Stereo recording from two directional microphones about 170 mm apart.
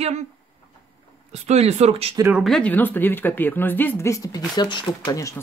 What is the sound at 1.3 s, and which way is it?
Speech, 40° right (ahead or behind).